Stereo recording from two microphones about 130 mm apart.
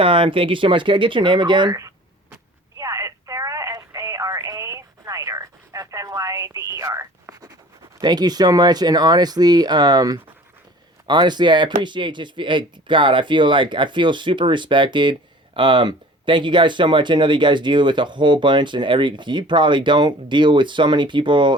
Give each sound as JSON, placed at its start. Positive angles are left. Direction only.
{"t": 0.0, "sound": "speech", "side_deg": -40}
{"t": 2.7, "sound": "telephone", "side_deg": -25}
{"t": 8.0, "sound": "speech", "side_deg": -30}